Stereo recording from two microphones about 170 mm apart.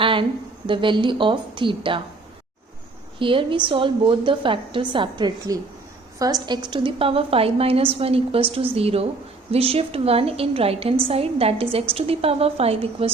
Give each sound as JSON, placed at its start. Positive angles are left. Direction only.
{"t": 0.0, "sound": "a sound", "side_deg": -30}
{"t": 0.7, "sound": "a woman's voice", "side_deg": -30}
{"t": 3.2, "sound": "a woman's voice", "side_deg": -30}